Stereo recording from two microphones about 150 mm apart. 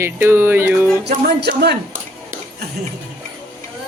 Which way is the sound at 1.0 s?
90° right.